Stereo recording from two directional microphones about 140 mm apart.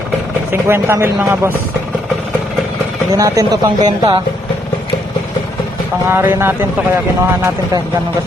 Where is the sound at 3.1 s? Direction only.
25° right (ahead or behind).